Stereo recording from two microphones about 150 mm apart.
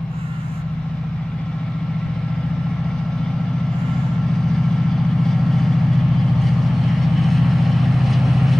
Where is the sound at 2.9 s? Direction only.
5° left (ahead or behind).